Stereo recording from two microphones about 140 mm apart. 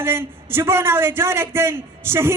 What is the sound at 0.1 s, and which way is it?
A man's voice, 15° right (ahead or behind).